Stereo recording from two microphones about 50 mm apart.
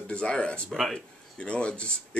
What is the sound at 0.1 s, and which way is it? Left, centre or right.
A man's voice, left.